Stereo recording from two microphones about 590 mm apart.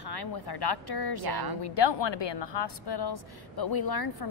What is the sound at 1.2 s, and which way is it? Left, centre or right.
Speech, right.